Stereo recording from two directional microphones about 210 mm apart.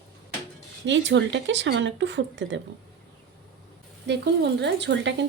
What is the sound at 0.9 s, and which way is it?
Speech, 60° right (ahead or behind).